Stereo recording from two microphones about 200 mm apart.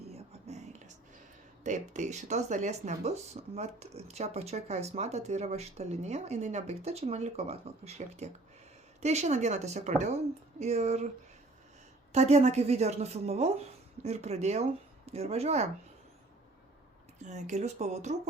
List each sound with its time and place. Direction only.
0.1 s whispering: 35° right (ahead or behind)
1.6 s speech: 35° right (ahead or behind)
12.1 s speech: 35° right (ahead or behind)
17.2 s speech: 35° right (ahead or behind)